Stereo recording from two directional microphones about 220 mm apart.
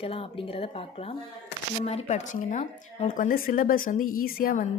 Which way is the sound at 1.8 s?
30° left (ahead or behind).